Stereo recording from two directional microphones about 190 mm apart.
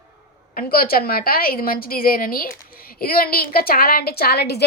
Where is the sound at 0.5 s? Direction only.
50° left (ahead or behind).